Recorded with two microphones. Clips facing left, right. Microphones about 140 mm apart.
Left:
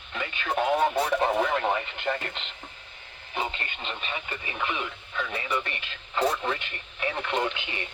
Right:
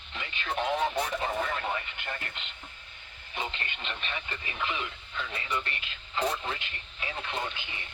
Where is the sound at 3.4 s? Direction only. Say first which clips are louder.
Left 3 dB; 40° left (ahead or behind).